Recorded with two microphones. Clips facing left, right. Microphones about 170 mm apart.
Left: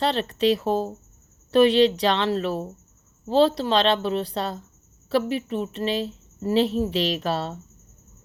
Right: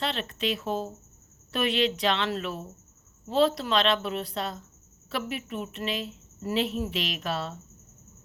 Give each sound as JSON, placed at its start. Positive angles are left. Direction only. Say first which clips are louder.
{"t": 0.0, "sound": "a woman's voice", "louder": "left 8 dB", "side_deg": 35}